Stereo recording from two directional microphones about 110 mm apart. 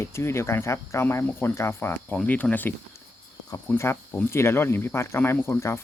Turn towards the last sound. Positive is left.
turn(degrees=25)  # may be behind; listen again after turning